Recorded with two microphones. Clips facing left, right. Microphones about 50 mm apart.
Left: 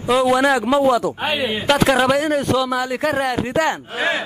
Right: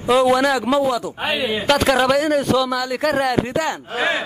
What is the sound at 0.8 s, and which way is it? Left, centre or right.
Speech, left.